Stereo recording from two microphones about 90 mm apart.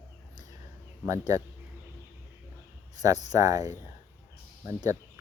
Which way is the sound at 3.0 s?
40° right (ahead or behind).